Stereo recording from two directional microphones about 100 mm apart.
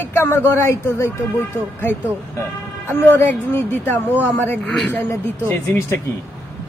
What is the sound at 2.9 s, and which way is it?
Speech, 20° left (ahead or behind).